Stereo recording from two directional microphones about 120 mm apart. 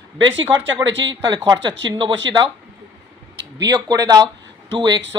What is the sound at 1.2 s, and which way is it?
A woman's voice, 40° right (ahead or behind).